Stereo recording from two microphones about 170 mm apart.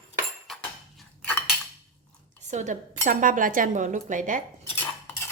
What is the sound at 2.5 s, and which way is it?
Speech, 45° right (ahead or behind).